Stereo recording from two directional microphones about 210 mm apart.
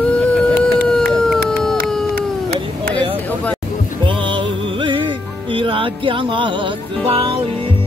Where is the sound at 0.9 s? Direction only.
5° left (ahead or behind).